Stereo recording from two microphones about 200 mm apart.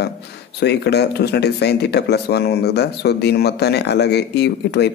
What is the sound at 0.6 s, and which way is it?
Speech, 55° left (ahead or behind).